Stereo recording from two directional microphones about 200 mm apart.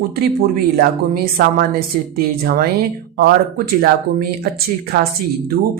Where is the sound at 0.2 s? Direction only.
50° right (ahead or behind).